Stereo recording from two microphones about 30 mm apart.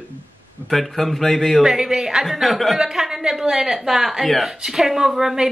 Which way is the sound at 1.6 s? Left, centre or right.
Centre.